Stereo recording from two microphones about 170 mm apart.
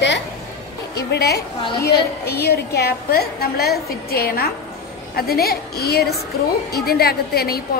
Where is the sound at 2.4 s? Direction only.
70° left (ahead or behind).